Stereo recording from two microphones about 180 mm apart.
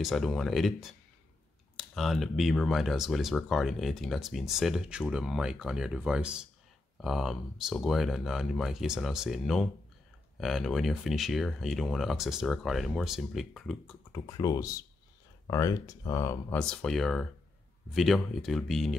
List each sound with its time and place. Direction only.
0.0 s speech: centre (ahead or behind)
14.1 s speech: 20° left (ahead or behind); by 18.9 s centre (ahead or behind)